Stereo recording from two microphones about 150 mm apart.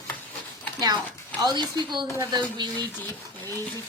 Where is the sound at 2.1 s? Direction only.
20° right (ahead or behind).